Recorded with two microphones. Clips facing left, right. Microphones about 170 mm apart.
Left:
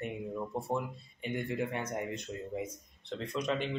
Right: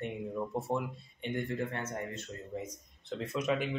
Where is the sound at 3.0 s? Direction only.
5° right (ahead or behind).